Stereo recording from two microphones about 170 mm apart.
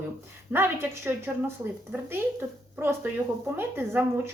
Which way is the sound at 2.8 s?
10° right (ahead or behind).